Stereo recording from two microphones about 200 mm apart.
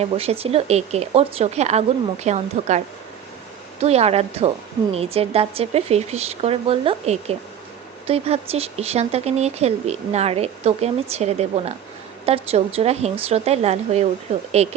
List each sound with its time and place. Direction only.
0.0 s speech: 30° right (ahead or behind)